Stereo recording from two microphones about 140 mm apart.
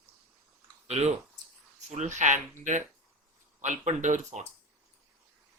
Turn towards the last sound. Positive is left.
turn(degrees=-55)  # may be behind; listen again after turning